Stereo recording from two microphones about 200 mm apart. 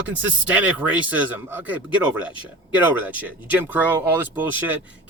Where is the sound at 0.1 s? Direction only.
5° right (ahead or behind).